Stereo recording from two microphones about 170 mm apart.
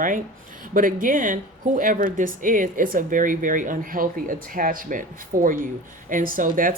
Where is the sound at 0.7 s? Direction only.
55° right (ahead or behind).